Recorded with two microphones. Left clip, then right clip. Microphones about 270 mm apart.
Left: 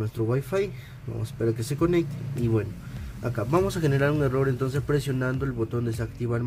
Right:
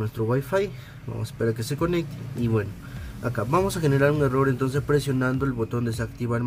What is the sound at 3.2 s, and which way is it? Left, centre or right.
Speech, centre.